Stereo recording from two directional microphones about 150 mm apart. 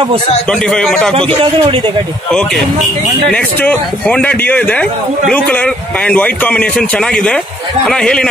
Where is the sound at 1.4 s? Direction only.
35° right (ahead or behind).